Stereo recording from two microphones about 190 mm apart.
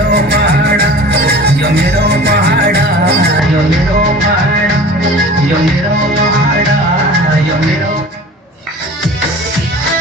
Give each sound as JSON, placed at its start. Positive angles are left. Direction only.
{"t": 0.1, "sound": "music", "side_deg": -60}